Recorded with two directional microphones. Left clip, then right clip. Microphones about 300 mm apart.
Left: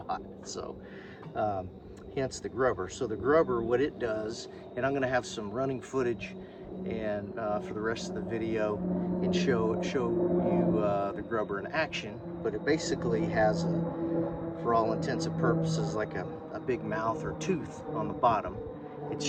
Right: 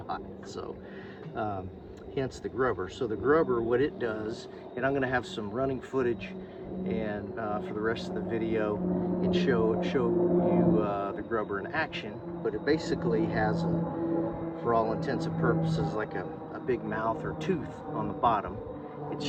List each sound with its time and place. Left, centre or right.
1.4 s speech: centre
10.2 s mantra: right
10.8 s speech: centre